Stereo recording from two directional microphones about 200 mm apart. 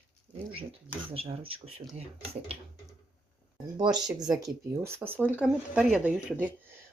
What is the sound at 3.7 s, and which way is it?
Speech, 20° right (ahead or behind).